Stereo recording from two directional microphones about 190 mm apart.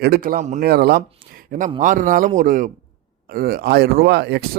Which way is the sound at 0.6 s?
55° right (ahead or behind).